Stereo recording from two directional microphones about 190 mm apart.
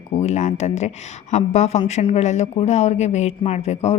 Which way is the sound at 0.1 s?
35° left (ahead or behind).